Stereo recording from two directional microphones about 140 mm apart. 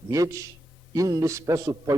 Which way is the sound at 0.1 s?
25° right (ahead or behind).